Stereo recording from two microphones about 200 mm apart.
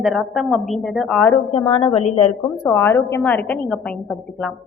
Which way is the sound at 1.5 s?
25° left (ahead or behind).